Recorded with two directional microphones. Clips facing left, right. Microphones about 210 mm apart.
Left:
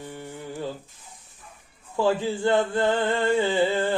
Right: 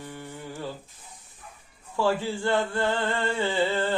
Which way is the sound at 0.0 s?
15° left (ahead or behind).